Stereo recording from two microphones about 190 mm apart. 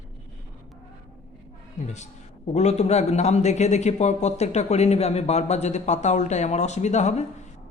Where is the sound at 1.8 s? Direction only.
35° left (ahead or behind).